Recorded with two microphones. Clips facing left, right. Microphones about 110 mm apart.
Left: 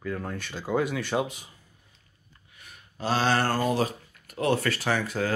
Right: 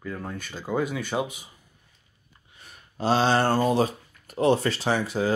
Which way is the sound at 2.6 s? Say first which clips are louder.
Right 5 dB; 30° right (ahead or behind).